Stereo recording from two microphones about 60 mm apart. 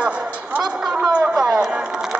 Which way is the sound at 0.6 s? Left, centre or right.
Centre.